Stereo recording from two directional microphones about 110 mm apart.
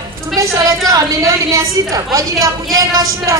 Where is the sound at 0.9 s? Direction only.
30° right (ahead or behind).